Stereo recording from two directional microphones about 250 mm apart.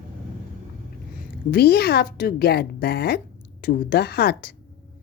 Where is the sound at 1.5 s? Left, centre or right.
Left.